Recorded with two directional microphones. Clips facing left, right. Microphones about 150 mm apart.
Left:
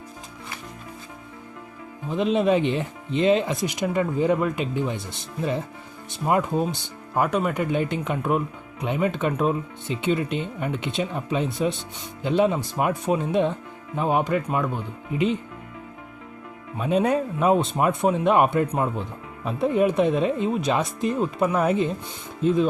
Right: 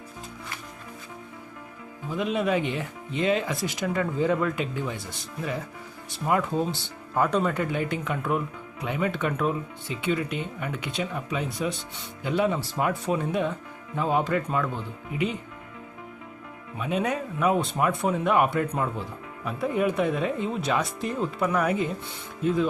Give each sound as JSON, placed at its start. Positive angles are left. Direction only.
{"t": 2.0, "sound": "speech", "side_deg": 25}
{"t": 6.1, "sound": "speech", "side_deg": 20}
{"t": 16.7, "sound": "speech", "side_deg": 35}